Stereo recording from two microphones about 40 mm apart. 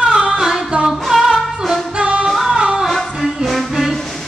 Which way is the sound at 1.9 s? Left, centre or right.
Right.